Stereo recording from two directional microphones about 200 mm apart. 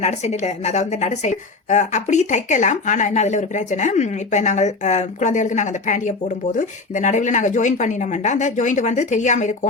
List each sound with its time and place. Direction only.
0.0 s speech: 35° left (ahead or behind)